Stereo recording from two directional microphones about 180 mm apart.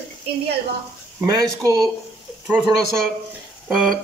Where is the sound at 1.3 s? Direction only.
20° right (ahead or behind).